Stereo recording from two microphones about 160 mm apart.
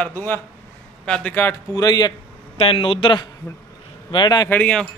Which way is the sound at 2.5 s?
35° left (ahead or behind).